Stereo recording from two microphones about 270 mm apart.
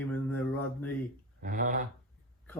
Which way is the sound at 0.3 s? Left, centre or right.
Centre.